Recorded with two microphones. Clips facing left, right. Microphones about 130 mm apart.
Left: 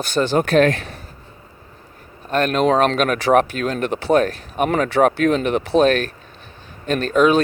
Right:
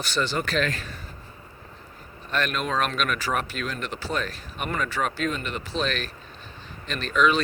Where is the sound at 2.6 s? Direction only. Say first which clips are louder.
Left 10 dB; 65° left (ahead or behind).